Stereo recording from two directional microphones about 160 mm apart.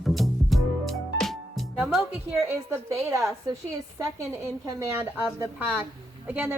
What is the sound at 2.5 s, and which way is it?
A woman's voice, 20° right (ahead or behind).